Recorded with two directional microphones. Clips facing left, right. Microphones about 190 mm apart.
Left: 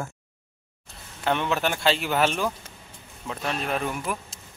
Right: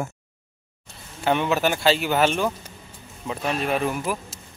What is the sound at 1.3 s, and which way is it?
Speech, 5° right (ahead or behind).